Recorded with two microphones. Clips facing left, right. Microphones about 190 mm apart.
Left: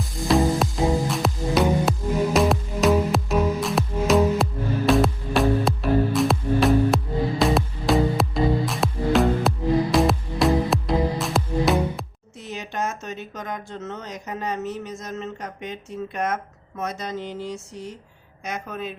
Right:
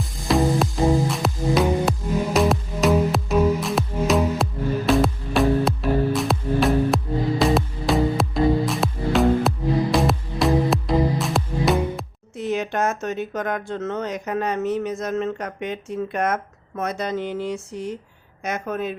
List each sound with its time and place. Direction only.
0.3 s music: centre (ahead or behind)
12.4 s a woman's voice: 60° right (ahead or behind)